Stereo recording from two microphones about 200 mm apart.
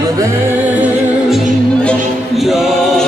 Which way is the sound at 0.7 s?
5° right (ahead or behind).